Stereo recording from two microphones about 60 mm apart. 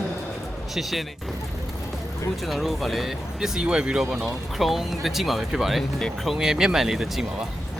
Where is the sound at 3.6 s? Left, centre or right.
Centre.